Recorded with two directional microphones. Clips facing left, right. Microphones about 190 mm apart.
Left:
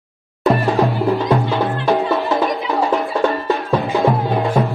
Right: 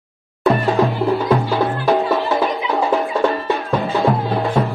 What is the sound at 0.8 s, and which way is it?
Music, 15° left (ahead or behind).